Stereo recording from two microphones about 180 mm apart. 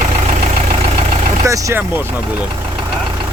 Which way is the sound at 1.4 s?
15° right (ahead or behind).